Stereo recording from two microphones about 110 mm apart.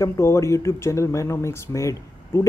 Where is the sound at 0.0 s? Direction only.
25° left (ahead or behind).